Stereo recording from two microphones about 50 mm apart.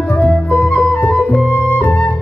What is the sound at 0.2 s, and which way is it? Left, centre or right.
Music, left.